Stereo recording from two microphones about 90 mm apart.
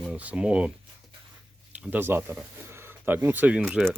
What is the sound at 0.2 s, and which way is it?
Speech, 15° right (ahead or behind).